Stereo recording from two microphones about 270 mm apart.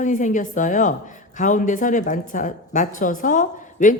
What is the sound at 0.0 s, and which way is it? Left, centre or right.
A woman's voice, left.